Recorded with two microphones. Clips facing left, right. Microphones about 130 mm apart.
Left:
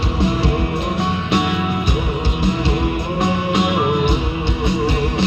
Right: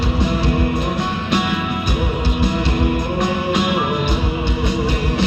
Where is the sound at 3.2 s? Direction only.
25° left (ahead or behind).